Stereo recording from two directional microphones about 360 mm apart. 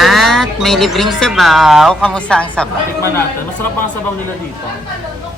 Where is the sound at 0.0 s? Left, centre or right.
Centre.